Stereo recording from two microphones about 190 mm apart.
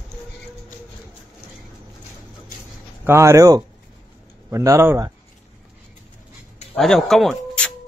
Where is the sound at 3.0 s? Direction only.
15° right (ahead or behind).